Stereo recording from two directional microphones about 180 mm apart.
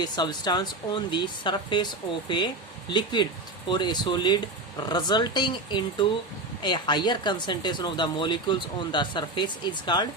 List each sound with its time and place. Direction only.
0.0 s speech: 25° left (ahead or behind)
2.9 s speech: 25° left (ahead or behind)